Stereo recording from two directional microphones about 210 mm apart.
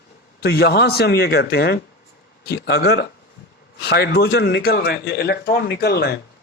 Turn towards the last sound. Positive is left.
turn(degrees=50)  # may be behind; listen again after turning